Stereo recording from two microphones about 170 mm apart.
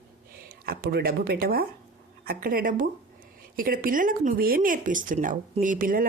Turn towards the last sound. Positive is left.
turn(degrees=-55)  # may be behind; listen again after turning